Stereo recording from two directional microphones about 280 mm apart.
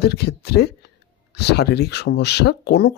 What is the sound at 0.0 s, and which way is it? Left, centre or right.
A man's voice, left.